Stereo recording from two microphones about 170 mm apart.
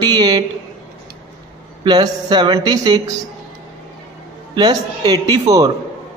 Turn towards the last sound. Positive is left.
turn(degrees=-20)  # may be behind; listen again after turning